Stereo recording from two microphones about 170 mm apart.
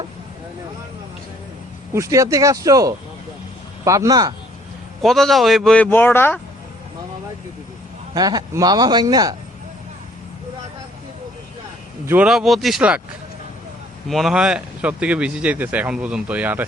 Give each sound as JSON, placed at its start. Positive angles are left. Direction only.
{"t": 1.9, "sound": "speech", "side_deg": -20}
{"t": 5.0, "sound": "a man's voice", "side_deg": 0}
{"t": 8.1, "sound": "speech", "side_deg": -25}
{"t": 12.0, "sound": "a man's voice", "side_deg": -10}
{"t": 14.1, "sound": "speech", "side_deg": 0}